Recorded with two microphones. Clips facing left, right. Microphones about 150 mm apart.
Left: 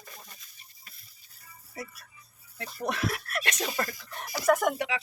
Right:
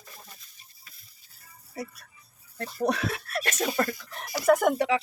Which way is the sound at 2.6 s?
40° right (ahead or behind).